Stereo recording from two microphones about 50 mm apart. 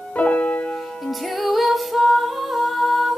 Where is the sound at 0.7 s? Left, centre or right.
Centre.